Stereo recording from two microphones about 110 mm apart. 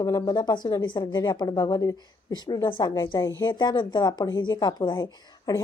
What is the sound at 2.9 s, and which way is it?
A woman's voice, 35° left (ahead or behind).